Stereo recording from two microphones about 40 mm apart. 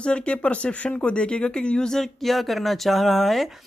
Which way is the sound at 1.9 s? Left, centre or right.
Centre.